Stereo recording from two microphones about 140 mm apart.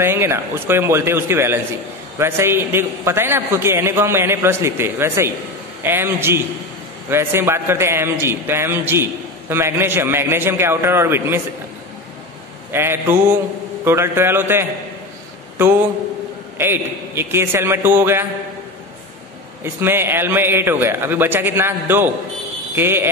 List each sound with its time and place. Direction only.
0.0 s a man's voice: 15° right (ahead or behind)
12.7 s a man's voice: 15° right (ahead or behind)
19.6 s a man's voice: 15° right (ahead or behind)